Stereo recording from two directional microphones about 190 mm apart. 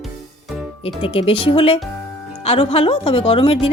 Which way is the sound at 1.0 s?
30° left (ahead or behind).